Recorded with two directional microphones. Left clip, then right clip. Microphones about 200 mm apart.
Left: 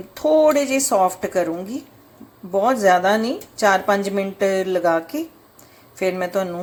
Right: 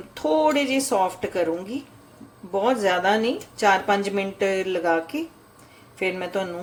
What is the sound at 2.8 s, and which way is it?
A woman's voice, 10° left (ahead or behind).